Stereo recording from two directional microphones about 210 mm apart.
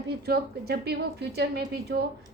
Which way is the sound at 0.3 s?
50° right (ahead or behind).